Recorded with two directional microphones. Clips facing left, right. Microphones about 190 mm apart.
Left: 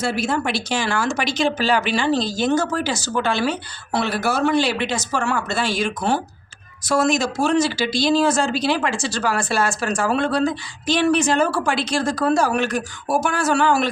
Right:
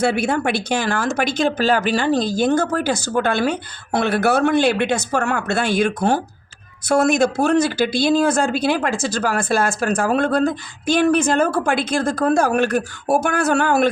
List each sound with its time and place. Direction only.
0.0 s speech: 60° right (ahead or behind)